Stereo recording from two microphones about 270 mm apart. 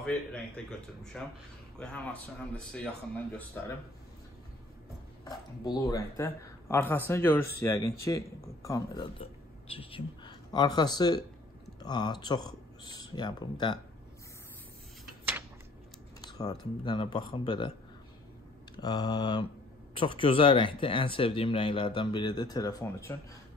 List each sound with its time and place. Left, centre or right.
0.0 s speech: centre
5.2 s speech: centre
16.2 s speech: centre
18.8 s speech: centre